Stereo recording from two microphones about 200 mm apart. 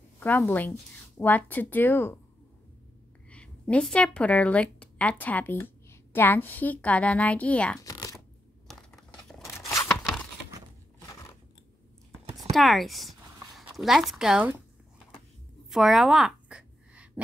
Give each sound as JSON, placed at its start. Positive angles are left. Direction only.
{"t": 0.2, "sound": "speech", "side_deg": 10}
{"t": 3.3, "sound": "a woman's voice", "side_deg": 5}
{"t": 7.8, "sound": "shuffling cards", "side_deg": 15}
{"t": 8.7, "sound": "a sound", "side_deg": 0}
{"t": 12.4, "sound": "speech", "side_deg": 0}
{"t": 15.7, "sound": "a sound", "side_deg": 0}